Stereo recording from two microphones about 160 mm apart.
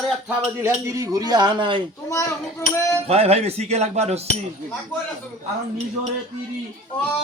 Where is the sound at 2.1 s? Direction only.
15° left (ahead or behind).